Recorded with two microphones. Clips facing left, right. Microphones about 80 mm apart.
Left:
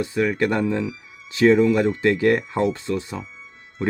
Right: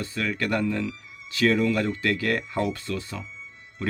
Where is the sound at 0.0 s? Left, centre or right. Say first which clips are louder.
Left 7 dB; centre.